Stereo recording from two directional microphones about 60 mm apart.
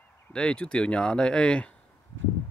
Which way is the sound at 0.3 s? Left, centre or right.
Centre.